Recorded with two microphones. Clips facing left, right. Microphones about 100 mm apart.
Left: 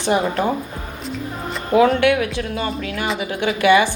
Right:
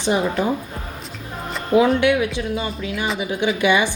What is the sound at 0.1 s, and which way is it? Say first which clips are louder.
Speech: left 1 dB; 45° left (ahead or behind).